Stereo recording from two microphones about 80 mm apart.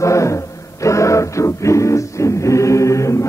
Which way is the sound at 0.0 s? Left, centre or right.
Left.